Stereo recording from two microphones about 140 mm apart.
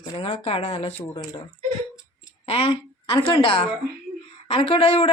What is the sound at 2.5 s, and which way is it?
A woman's voice, 40° left (ahead or behind).